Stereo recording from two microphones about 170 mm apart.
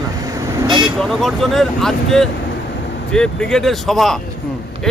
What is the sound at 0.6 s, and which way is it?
Vehicle, 25° right (ahead or behind).